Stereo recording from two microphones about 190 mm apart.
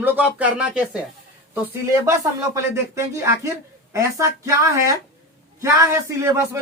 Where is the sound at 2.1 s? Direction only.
15° right (ahead or behind).